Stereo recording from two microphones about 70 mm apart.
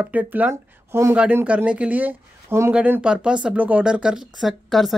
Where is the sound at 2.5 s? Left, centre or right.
Right.